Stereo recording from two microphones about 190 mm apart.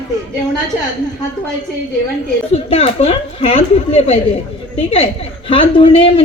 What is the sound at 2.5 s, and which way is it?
A woman's voice, 30° left (ahead or behind).